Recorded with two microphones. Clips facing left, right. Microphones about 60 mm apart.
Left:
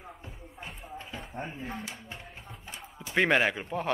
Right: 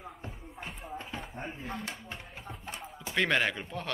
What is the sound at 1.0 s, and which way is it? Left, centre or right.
Speech, centre.